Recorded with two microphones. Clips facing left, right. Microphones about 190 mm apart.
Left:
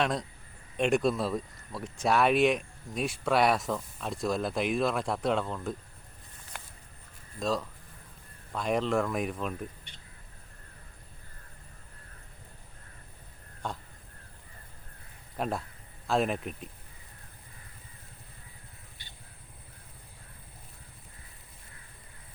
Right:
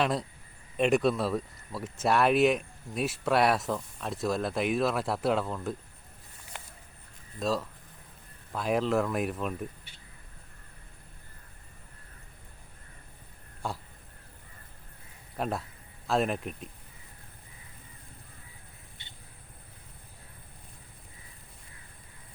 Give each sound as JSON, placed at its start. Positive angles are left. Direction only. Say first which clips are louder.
{"t": 0.0, "sound": "speech", "louder": "right 1 dB", "side_deg": -5}
{"t": 7.3, "sound": "speech", "louder": "right 1 dB", "side_deg": 0}
{"t": 13.6, "sound": "crow", "louder": "right 1 dB", "side_deg": -10}
{"t": 15.4, "sound": "speech", "louder": "even", "side_deg": 0}
{"t": 19.0, "sound": "vehicle", "louder": "even", "side_deg": -25}